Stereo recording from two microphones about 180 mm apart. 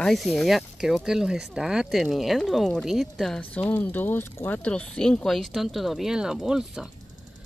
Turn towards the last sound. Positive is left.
turn(degrees=-5)  # may be behind; listen again after turning